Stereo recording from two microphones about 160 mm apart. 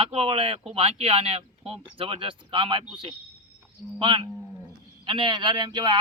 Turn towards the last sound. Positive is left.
turn(degrees=-30)  # may be behind; listen again after turning